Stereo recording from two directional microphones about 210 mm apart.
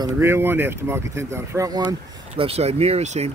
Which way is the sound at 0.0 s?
10° right (ahead or behind).